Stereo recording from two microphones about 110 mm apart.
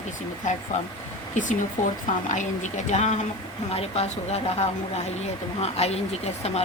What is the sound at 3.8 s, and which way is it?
Speech, 70° left (ahead or behind).